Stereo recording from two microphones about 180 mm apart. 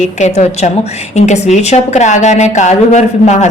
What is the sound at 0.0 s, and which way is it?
A woman's voice, 40° left (ahead or behind).